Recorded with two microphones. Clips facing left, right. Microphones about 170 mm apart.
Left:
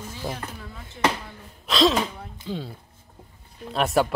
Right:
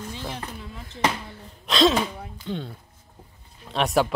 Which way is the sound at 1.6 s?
Centre (ahead or behind).